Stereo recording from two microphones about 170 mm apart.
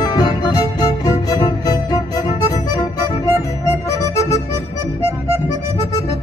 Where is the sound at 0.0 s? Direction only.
25° left (ahead or behind).